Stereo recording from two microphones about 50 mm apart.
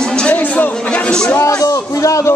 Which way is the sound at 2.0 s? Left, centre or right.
Left.